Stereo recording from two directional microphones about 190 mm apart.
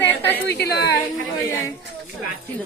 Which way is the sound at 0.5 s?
60° left (ahead or behind).